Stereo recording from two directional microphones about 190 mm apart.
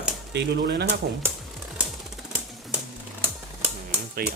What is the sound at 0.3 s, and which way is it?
Speech, 60° right (ahead or behind).